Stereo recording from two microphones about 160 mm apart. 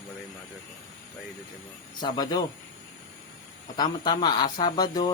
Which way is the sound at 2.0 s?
25° left (ahead or behind).